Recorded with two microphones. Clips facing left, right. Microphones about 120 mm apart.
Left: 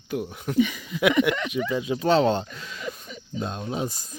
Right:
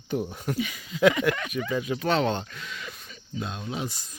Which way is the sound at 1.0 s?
20° left (ahead or behind).